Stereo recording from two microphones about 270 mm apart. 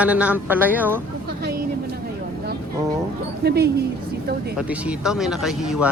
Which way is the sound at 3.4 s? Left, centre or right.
Right.